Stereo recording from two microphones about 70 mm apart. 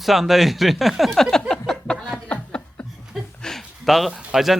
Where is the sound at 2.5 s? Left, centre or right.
Centre.